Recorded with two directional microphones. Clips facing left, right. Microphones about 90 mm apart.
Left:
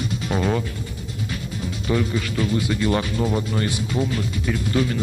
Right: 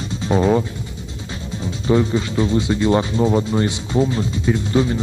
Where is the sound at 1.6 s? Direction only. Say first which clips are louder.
Right 6 dB; 25° right (ahead or behind).